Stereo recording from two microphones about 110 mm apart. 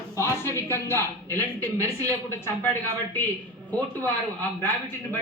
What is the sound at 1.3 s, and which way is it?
Speech, 30° right (ahead or behind).